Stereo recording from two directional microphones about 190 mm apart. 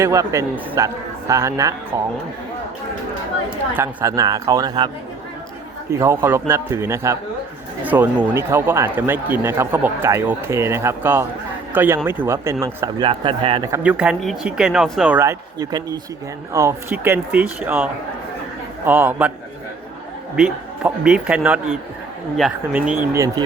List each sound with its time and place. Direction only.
0.0 s speech: 15° right (ahead or behind)
3.8 s a man's voice: 15° right (ahead or behind)
5.9 s a man's voice: 15° right (ahead or behind)
13.1 s a man's voice: 25° right (ahead or behind)
13.7 s speech: 10° right (ahead or behind)
18.9 s speech: 10° right (ahead or behind)
20.3 s speech: 5° right (ahead or behind)